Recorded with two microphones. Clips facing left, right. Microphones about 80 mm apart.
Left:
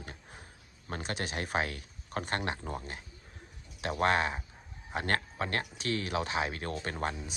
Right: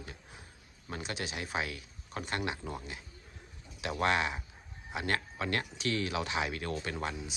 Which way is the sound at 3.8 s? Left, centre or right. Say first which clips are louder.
Left 2 dB; left.